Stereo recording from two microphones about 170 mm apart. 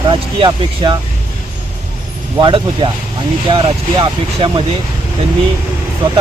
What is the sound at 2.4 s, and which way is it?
Speech, 30° right (ahead or behind).